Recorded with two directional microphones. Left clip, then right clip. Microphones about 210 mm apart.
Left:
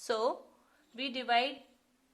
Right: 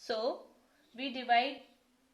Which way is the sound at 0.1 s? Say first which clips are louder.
Left 2 dB; 40° left (ahead or behind).